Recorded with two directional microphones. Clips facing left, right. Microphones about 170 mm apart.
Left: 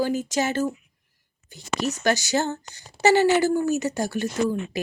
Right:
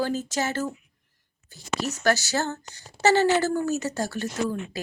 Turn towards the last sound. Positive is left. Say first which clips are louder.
# left 4 dB
turn(degrees=15)  # may be behind; listen again after turning